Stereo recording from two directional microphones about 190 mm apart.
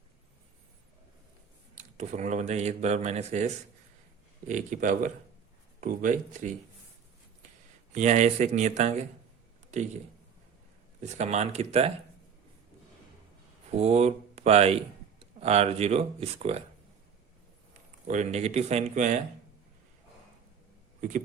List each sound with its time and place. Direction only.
1.7 s speech: 40° right (ahead or behind)
7.9 s speech: 40° right (ahead or behind)
11.0 s speech: 35° right (ahead or behind)
13.7 s speech: 35° right (ahead or behind)
18.1 s speech: 40° right (ahead or behind)